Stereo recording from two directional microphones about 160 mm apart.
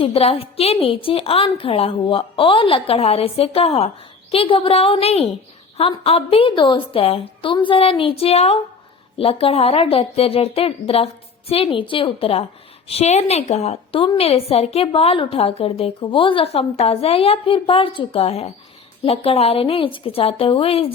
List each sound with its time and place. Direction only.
0.0 s a woman's voice: 35° left (ahead or behind)